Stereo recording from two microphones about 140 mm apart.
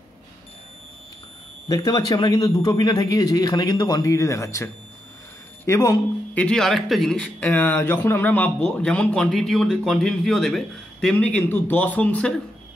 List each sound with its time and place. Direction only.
1.9 s speech: 30° left (ahead or behind)
5.7 s speech: 25° left (ahead or behind)
6.3 s speech: 5° left (ahead or behind)